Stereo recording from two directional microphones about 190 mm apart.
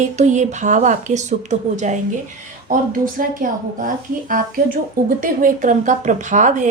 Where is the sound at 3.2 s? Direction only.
45° right (ahead or behind).